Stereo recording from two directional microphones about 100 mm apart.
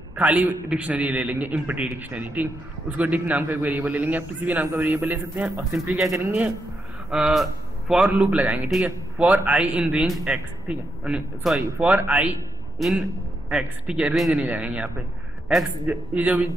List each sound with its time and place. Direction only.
0.1 s a man's voice: 15° right (ahead or behind)
6.0 s a man's voice: 30° right (ahead or behind)
7.1 s a man's voice: 5° right (ahead or behind)
12.7 s a man's voice: centre (ahead or behind)